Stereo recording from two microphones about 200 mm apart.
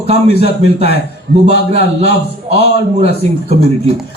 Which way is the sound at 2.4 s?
30° right (ahead or behind).